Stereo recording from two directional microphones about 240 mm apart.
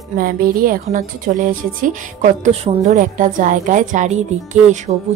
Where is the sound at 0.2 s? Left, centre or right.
Right.